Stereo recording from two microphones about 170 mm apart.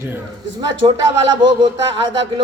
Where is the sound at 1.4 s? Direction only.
25° right (ahead or behind).